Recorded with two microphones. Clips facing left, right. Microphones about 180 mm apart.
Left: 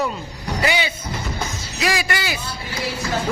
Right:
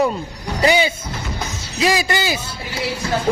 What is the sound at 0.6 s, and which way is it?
Speech, 40° right (ahead or behind).